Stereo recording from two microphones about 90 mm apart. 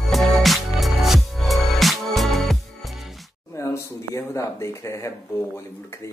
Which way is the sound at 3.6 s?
30° left (ahead or behind).